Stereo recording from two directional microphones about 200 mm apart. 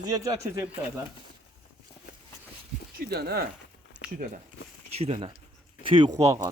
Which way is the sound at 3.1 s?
50° right (ahead or behind).